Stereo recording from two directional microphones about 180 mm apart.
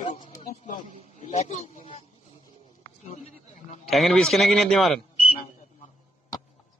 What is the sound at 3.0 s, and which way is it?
Speech, 35° left (ahead or behind).